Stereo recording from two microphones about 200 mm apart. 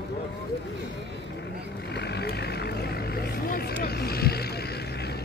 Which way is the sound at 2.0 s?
55° left (ahead or behind).